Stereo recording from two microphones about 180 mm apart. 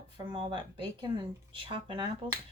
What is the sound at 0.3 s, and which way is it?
Speech, 25° right (ahead or behind).